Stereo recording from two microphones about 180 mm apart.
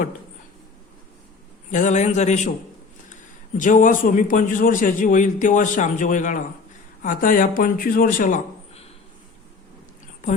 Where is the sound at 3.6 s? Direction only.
45° left (ahead or behind).